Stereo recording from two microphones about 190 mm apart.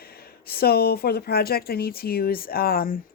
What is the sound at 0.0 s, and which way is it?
Speech, 55° left (ahead or behind).